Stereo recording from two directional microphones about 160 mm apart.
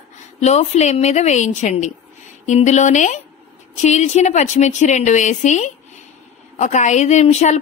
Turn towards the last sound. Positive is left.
turn(degrees=45)  # may be behind; listen again after turning